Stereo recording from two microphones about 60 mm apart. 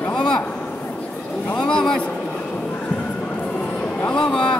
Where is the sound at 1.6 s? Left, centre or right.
Centre.